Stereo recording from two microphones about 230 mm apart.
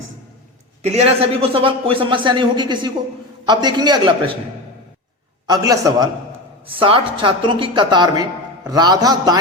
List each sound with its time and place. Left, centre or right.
0.8 s a woman's voice: right
5.5 s a man's voice: centre